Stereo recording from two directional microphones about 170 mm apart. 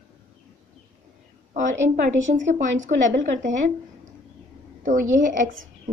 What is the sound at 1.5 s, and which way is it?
A woman's voice, 45° right (ahead or behind).